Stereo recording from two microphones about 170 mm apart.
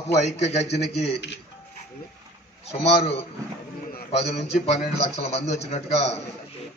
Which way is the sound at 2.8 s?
35° left (ahead or behind).